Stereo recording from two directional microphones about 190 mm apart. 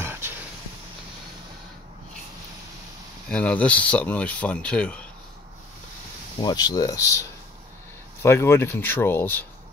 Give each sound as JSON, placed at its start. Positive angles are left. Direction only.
{"t": 0.0, "sound": "a sound", "side_deg": -10}
{"t": 3.3, "sound": "speech", "side_deg": 5}
{"t": 6.4, "sound": "speech", "side_deg": 20}